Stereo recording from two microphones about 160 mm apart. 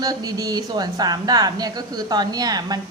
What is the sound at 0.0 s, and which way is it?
Speech, 25° right (ahead or behind).